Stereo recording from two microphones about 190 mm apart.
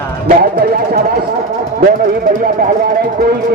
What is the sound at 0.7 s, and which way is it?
Speech, 50° right (ahead or behind).